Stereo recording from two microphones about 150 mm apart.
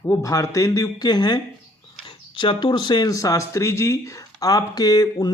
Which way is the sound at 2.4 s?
30° left (ahead or behind).